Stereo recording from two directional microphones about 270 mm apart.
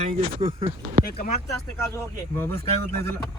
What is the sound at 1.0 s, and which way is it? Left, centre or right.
Speech, left.